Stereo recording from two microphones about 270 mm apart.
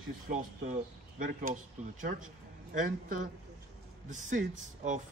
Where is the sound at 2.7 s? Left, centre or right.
Right.